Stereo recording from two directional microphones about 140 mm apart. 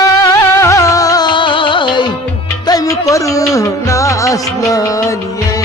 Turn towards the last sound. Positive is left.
turn(degrees=25)  # may be behind; listen again after turning